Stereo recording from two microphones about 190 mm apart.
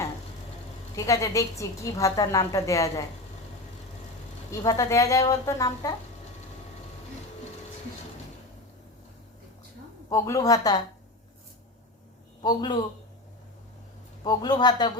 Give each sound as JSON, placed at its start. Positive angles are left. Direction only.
{"t": 0.9, "sound": "a woman's voice", "side_deg": 15}
{"t": 4.6, "sound": "a woman's voice", "side_deg": 15}
{"t": 10.1, "sound": "a woman's voice", "side_deg": 15}
{"t": 12.4, "sound": "a man's voice", "side_deg": 25}
{"t": 14.3, "sound": "speech", "side_deg": 20}